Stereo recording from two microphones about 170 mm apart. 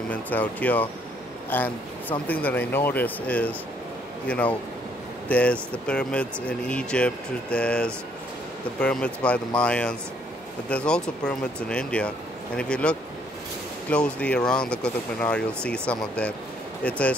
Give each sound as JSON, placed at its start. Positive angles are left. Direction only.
{"t": 0.1, "sound": "speech", "side_deg": 10}